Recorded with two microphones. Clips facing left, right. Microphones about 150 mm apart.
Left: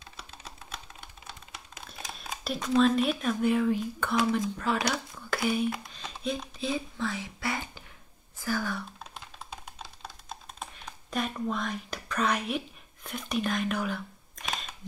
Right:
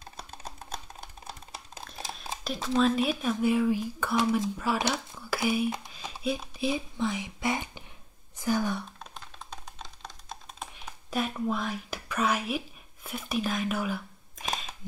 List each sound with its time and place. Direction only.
0.0 s typing: 45° right (ahead or behind)
2.4 s speech: centre (ahead or behind)
4.7 s speech: 25° right (ahead or behind)
5.1 s a sound: 5° right (ahead or behind)
5.9 s speech: 10° right (ahead or behind)
9.1 s music: 5° left (ahead or behind)
10.6 s speech: 5° right (ahead or behind)